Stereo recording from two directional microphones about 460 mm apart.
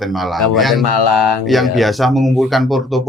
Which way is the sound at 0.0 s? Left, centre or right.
Centre.